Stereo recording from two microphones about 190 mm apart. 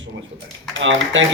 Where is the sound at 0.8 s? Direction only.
80° right.